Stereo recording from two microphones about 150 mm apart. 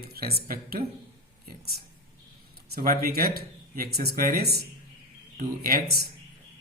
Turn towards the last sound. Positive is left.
turn(degrees=-85)